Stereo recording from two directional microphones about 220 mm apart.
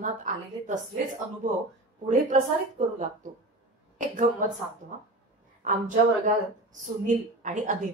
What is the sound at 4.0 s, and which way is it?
A woman's voice, 35° right (ahead or behind).